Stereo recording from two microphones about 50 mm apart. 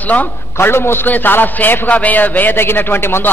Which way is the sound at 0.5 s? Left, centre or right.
Left.